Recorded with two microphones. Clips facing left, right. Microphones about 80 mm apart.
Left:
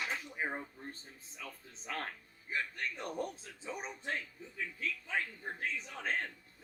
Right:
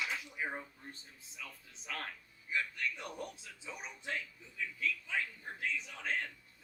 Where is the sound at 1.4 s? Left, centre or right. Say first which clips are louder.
Left 2 dB; left.